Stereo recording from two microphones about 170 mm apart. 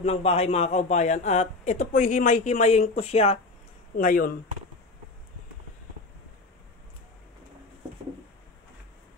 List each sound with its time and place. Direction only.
0.0 s a man's voice: 35° left (ahead or behind)
3.9 s speech: 55° left (ahead or behind)